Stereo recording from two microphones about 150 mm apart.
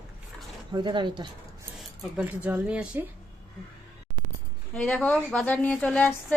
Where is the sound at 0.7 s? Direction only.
30° right (ahead or behind).